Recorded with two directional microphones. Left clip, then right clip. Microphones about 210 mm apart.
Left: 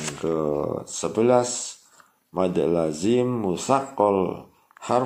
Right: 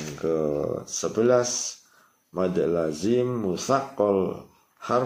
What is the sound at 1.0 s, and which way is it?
Speech, 20° left (ahead or behind).